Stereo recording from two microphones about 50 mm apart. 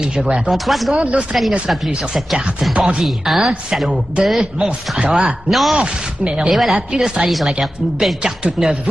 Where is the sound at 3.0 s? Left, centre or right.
Centre.